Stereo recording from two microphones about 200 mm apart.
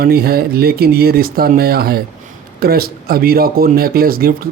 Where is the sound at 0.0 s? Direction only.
50° right (ahead or behind).